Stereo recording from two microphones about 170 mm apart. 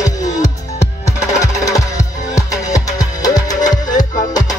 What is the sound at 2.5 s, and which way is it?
Music, 20° left (ahead or behind).